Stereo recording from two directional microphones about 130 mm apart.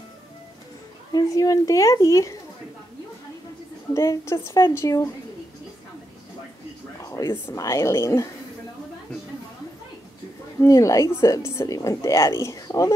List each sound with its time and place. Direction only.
1.1 s a woman's voice: 25° left (ahead or behind)
3.9 s a woman's voice: 25° left (ahead or behind)
7.0 s a woman's voice: 25° left (ahead or behind)
10.6 s a woman's voice: 25° left (ahead or behind)